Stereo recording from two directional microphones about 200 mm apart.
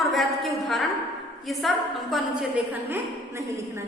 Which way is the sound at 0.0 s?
Centre (ahead or behind).